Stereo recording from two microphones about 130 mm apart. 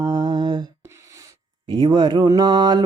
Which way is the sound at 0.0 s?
30° right (ahead or behind).